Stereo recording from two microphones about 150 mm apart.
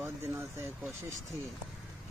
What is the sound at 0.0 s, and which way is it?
Speech, 15° right (ahead or behind).